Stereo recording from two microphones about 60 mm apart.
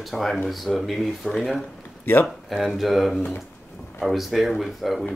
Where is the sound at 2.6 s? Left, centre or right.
Centre.